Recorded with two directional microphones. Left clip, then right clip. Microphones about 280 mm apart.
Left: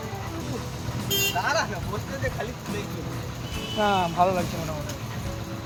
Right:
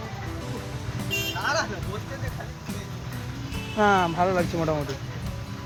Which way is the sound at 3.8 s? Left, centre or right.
Centre.